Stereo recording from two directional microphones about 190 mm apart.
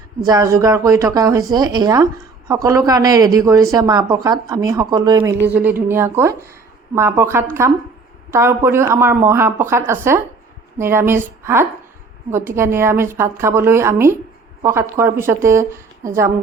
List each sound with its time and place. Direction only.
0.3 s speech: 15° right (ahead or behind)
5.5 s speech: 10° right (ahead or behind)